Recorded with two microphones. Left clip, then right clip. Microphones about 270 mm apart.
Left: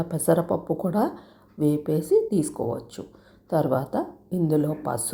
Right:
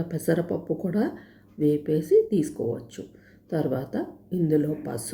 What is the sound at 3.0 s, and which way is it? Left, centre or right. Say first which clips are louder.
Speech: left 1 dB; left.